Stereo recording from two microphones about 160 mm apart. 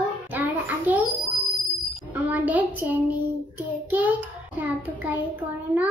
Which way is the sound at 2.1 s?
10° right (ahead or behind).